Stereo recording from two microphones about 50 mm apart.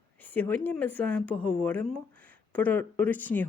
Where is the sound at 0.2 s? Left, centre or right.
Left.